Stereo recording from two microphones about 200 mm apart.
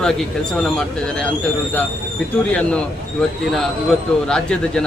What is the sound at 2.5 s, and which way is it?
Speech, 5° left (ahead or behind).